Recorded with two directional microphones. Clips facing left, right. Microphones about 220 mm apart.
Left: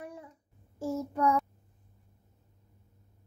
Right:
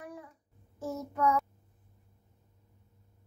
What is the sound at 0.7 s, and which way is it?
Child singing, 30° left (ahead or behind).